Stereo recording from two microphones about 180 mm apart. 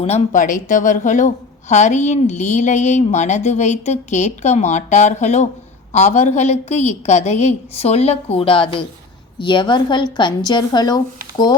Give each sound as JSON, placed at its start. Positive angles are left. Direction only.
{"t": 0.0, "sound": "a woman's voice", "side_deg": 40}